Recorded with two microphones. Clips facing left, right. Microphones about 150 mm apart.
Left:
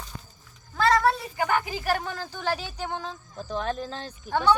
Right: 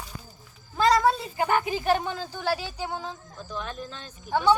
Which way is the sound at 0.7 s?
15° right (ahead or behind).